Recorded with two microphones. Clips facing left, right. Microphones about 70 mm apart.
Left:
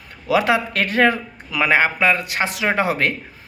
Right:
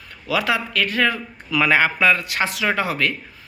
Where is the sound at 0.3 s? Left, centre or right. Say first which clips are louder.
Left 4 dB; left.